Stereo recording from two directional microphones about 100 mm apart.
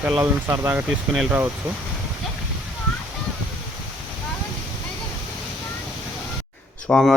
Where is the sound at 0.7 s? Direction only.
5° right (ahead or behind).